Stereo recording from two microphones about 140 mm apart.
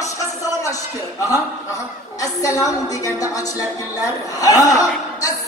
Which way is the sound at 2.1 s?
25° left (ahead or behind).